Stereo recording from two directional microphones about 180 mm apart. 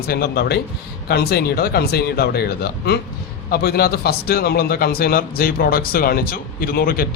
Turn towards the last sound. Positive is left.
turn(degrees=55)  # may be behind; listen again after turning